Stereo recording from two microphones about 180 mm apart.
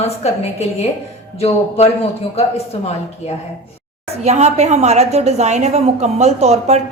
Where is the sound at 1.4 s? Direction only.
35° left (ahead or behind).